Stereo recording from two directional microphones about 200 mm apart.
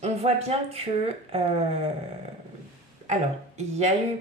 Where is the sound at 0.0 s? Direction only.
30° right (ahead or behind).